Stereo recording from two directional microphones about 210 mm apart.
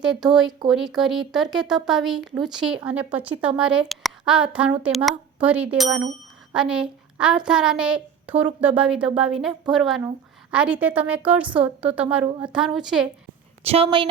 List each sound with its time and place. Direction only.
0.0 s a woman's voice: 5° right (ahead or behind)
13.7 s a woman's voice: 25° right (ahead or behind)